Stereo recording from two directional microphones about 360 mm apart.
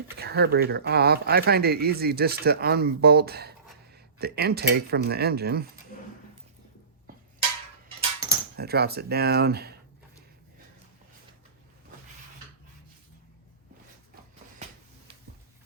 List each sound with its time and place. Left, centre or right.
0.2 s speech: right
8.5 s speech: right